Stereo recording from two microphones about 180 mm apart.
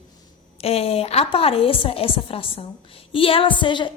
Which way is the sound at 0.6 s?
35° left (ahead or behind).